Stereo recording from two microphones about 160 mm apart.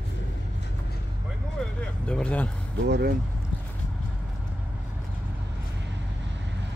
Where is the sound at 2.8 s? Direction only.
80° right.